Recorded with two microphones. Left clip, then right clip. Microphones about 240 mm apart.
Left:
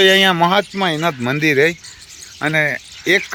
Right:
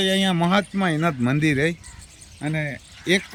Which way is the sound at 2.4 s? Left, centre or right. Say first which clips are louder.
Left 12 dB; left.